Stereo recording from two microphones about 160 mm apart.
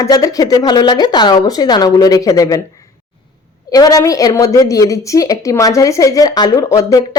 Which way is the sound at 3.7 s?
25° left (ahead or behind).